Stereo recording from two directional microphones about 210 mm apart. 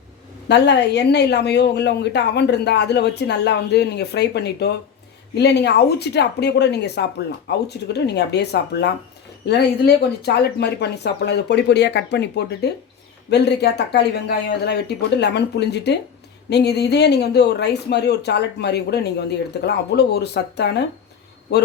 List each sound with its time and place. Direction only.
0.4 s a woman's voice: 55° left (ahead or behind)